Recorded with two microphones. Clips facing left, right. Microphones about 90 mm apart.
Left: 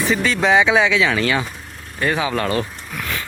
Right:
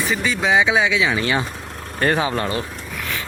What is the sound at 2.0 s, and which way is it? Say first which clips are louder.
Speech: right 1 dB; 40° right (ahead or behind).